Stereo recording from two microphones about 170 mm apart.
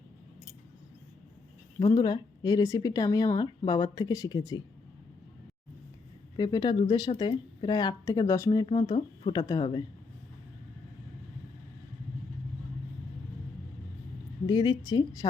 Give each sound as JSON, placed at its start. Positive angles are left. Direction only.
{"t": 1.8, "sound": "speech", "side_deg": 25}
{"t": 6.3, "sound": "speech", "side_deg": 25}
{"t": 8.6, "sound": "speech", "side_deg": 30}
{"t": 14.4, "sound": "speech", "side_deg": 25}